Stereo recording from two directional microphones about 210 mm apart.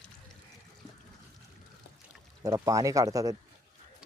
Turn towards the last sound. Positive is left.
turn(degrees=-15)  # may be behind; listen again after turning